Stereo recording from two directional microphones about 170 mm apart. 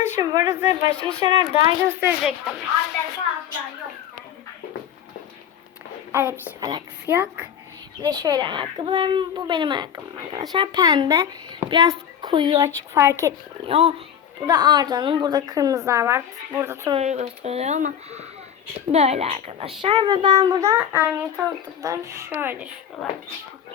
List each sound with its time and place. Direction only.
0.0 s speech: 20° right (ahead or behind)
2.0 s speech: 5° right (ahead or behind)
6.1 s speech: 15° right (ahead or behind)
8.0 s a child's voice: 25° right (ahead or behind)
13.7 s speech: 35° right (ahead or behind)
14.4 s a child's voice: 25° right (ahead or behind)
16.9 s a child's voice: 40° right (ahead or behind); by 22.7 s 10° right (ahead or behind)